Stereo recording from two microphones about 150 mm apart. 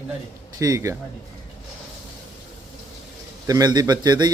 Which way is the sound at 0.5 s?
20° right (ahead or behind).